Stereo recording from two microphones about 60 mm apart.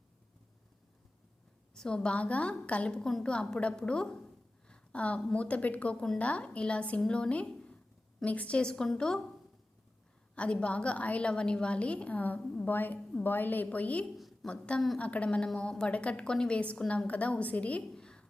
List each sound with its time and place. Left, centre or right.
1.7 s a woman's voice: centre
3.1 s a woman's voice: centre
3.3 s a woman's voice: centre
4.7 s a sound: centre
5.3 s a woman's voice: left
10.3 s a woman's voice: centre
17.9 s a sound: centre